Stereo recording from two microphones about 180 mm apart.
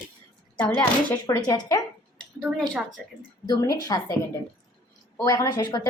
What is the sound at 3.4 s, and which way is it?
Speech, 20° left (ahead or behind).